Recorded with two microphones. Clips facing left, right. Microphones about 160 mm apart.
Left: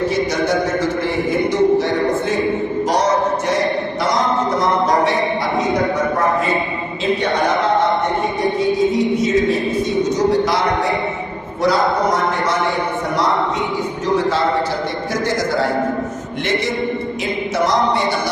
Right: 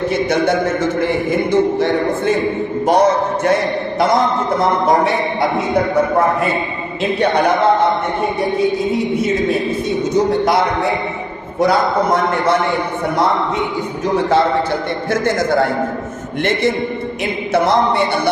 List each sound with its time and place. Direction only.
1.5 s a man's voice: 55° right (ahead or behind)
15.1 s a man's voice: 55° right (ahead or behind)
17.5 s a man's voice: 60° right (ahead or behind)